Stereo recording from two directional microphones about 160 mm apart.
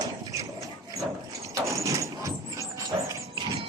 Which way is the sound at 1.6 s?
20° right (ahead or behind).